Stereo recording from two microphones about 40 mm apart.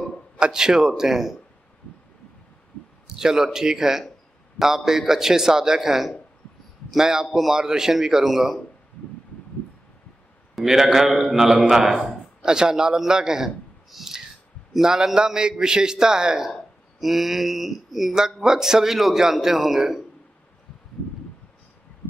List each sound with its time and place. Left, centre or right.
0.4 s a man's voice: centre
3.1 s a man's voice: centre
10.6 s a man's voice: centre
17.0 s a man's voice: centre